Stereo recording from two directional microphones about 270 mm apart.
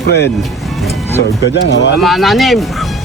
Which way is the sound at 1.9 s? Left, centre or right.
Centre.